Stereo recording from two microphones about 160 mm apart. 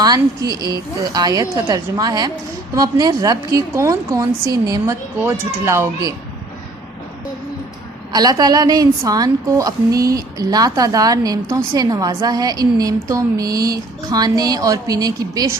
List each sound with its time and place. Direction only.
0.0 s a woman's voice: 25° right (ahead or behind)
8.1 s a woman's voice: 25° right (ahead or behind)